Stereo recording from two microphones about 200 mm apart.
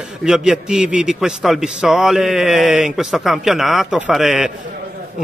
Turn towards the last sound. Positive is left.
turn(degrees=0)  # may be behind; listen again after turning